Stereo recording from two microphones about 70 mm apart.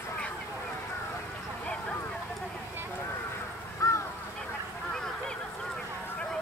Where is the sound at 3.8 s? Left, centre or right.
Left.